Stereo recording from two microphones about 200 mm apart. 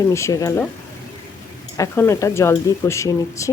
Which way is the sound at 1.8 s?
15° left (ahead or behind).